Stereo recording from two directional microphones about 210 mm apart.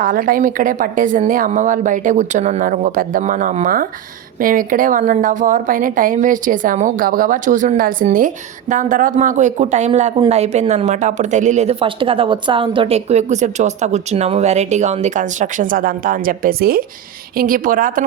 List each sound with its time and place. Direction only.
0.0 s a woman's voice: 40° right (ahead or behind)